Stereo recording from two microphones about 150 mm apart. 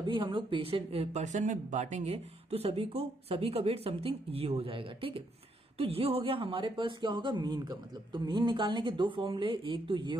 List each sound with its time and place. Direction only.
0.0 s speech: 35° right (ahead or behind)